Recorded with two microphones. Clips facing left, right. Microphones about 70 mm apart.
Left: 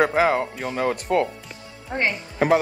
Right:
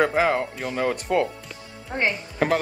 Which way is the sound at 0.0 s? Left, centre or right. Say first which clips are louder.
Left 2 dB; centre.